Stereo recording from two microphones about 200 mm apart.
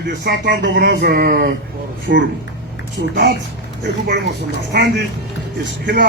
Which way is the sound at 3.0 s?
60° right (ahead or behind).